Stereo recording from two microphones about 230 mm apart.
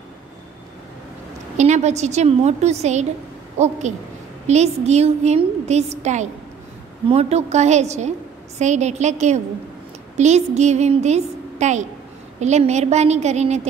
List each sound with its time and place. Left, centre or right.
1.6 s a woman's voice: right